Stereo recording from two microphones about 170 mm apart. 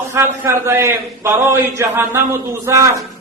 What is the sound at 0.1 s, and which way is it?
A man's voice, 15° right (ahead or behind).